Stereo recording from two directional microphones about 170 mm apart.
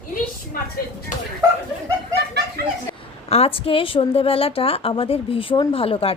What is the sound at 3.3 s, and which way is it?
A woman's voice, 35° left (ahead or behind).